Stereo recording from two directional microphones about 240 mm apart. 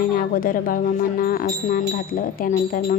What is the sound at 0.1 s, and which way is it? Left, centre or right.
Speech, left.